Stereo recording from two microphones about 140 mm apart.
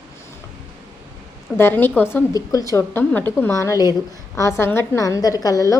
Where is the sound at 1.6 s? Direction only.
15° left (ahead or behind).